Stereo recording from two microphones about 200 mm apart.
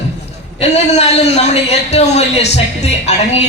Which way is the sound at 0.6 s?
30° left (ahead or behind).